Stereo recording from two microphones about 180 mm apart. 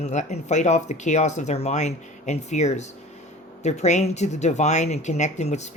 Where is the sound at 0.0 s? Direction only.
40° left (ahead or behind).